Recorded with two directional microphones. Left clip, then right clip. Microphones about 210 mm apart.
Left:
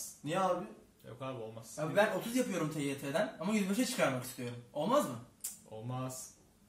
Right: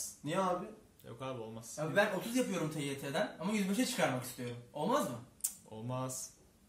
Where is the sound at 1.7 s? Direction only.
10° right (ahead or behind).